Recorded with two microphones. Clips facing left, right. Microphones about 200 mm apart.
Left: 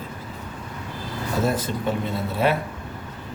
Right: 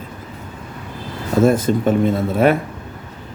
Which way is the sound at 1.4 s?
50° right (ahead or behind).